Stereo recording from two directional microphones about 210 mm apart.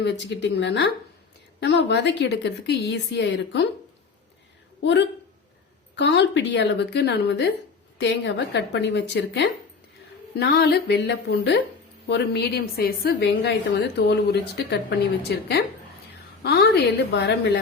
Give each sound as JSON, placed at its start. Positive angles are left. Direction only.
{"t": 0.0, "sound": "a woman's voice", "side_deg": 55}
{"t": 4.8, "sound": "a woman's voice", "side_deg": 55}